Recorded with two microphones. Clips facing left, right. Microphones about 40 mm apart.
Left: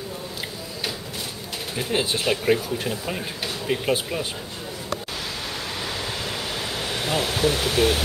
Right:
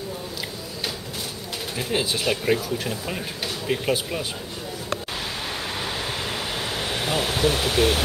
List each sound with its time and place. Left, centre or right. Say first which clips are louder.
1.8 s speech: left 1 dB; centre
5.8 s vehicle: right 1 dB; centre